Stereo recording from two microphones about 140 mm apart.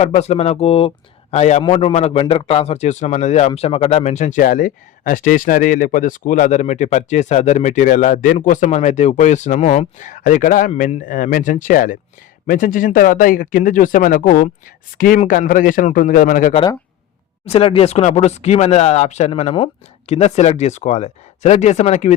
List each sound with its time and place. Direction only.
0.0 s a man's voice: 50° left (ahead or behind); by 16.6 s 75° left (ahead or behind)
17.4 s speech: 45° left (ahead or behind)